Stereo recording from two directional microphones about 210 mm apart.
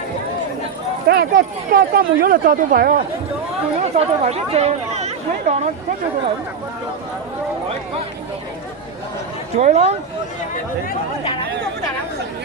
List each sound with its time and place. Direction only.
1.0 s speech: 50° right (ahead or behind)
3.8 s speech: 30° right (ahead or behind)
9.6 s speech: 35° right (ahead or behind)